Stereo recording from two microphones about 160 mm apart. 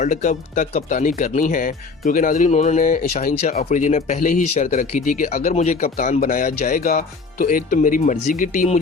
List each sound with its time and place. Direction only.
0.0 s speech: 50° left (ahead or behind)